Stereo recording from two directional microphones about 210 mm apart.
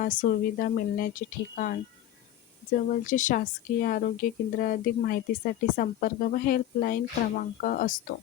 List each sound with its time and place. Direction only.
0.0 s speech: 40° left (ahead or behind)